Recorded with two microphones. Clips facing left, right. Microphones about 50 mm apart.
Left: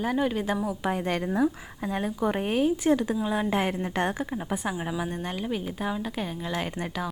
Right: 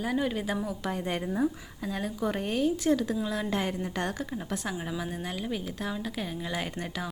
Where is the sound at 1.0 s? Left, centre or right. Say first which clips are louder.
Left 3 dB; left.